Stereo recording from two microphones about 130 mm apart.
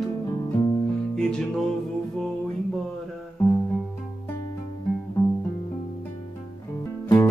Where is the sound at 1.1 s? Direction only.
5° left (ahead or behind).